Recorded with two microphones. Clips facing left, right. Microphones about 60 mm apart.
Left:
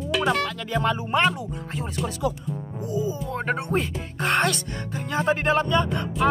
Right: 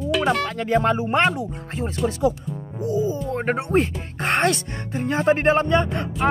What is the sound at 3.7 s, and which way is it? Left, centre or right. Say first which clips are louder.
Speech: right 5 dB; right.